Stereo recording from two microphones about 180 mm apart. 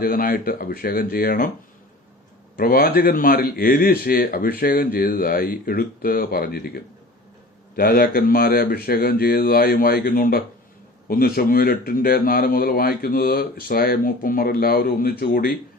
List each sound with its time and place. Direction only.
0.0 s speech: 55° left (ahead or behind)
2.6 s speech: 55° left (ahead or behind)